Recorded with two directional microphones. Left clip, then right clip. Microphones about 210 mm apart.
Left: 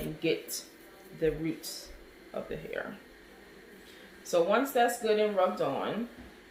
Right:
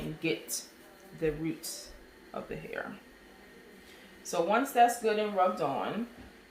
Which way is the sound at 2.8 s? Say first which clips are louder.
Even; 15° right (ahead or behind).